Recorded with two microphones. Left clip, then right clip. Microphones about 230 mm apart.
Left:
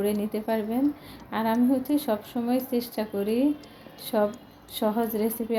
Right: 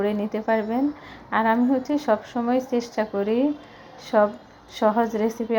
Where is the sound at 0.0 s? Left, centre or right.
Centre.